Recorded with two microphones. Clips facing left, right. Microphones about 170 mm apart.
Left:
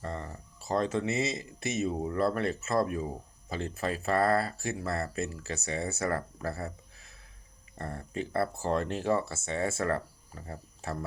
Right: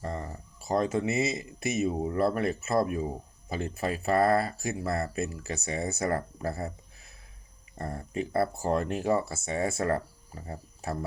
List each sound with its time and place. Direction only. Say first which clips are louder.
0.0 s a sound: right 2 dB; 15° right (ahead or behind)
1.5 s speech: right 3 dB; 15° right (ahead or behind)
7.8 s speech: right 3 dB; 15° right (ahead or behind)